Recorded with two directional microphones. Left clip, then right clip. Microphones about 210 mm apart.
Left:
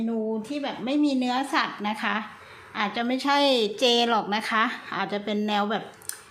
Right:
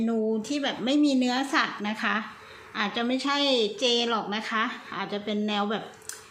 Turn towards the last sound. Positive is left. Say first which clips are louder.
# left 2 dB
turn(degrees=10)  # may be behind; listen again after turning